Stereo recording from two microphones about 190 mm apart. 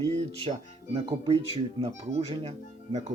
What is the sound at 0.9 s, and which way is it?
Speech, 25° right (ahead or behind).